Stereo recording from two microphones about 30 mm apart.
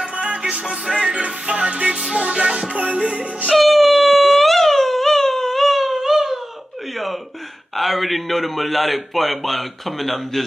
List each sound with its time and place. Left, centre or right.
0.1 s music: right
0.7 s music: centre
1.0 s music: right
2.1 s music: right
2.7 s music: right
3.5 s dog: centre
7.7 s a man's voice: centre